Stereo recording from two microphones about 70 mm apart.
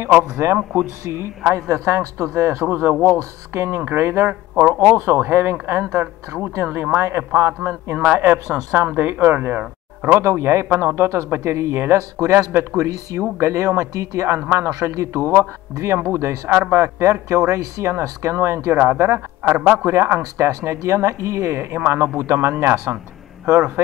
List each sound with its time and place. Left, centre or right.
0.4 s speech: right
2.6 s speech: right
3.5 s speech: right
4.3 s speech: right
4.9 s speech: right
14.7 s speech: right
18.8 s speech: right